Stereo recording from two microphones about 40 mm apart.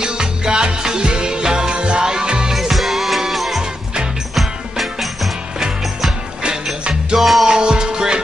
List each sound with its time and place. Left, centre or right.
0.0 s music: centre
2.5 s music: centre
6.4 s music: right
7.2 s music: centre
7.4 s music: centre